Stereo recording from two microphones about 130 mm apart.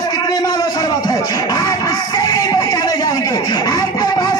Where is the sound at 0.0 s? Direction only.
30° left (ahead or behind).